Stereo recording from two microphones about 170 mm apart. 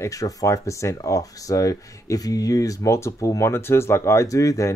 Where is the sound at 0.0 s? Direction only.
20° left (ahead or behind).